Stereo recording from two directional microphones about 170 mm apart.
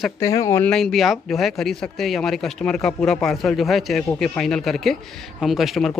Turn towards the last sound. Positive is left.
turn(degrees=0)  # may be behind; listen again after turning